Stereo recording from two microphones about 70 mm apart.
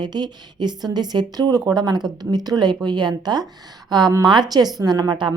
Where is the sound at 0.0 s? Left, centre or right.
Right.